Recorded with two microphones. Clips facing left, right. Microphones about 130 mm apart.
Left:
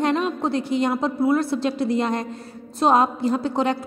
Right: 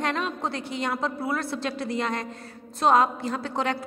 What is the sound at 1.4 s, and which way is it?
A woman's voice, 10° left (ahead or behind).